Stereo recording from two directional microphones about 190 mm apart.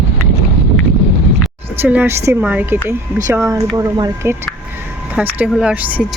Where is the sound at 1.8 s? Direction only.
10° right (ahead or behind).